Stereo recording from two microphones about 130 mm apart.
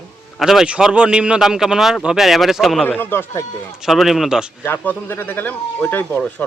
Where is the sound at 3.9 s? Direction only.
Centre (ahead or behind).